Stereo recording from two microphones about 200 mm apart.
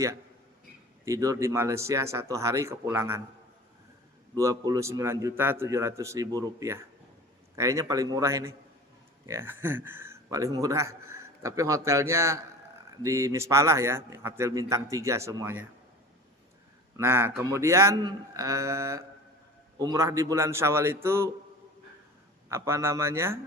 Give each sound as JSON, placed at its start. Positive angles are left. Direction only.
{"t": 1.0, "sound": "speech", "side_deg": -15}
{"t": 4.4, "sound": "speech", "side_deg": -15}
{"t": 17.0, "sound": "speech", "side_deg": -10}
{"t": 22.4, "sound": "speech", "side_deg": -15}